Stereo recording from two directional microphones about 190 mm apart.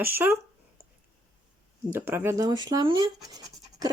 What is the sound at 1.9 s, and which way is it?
Speech, 10° right (ahead or behind).